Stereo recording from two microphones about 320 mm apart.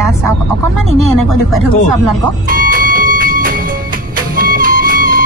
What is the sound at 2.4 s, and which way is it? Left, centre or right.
Music, right.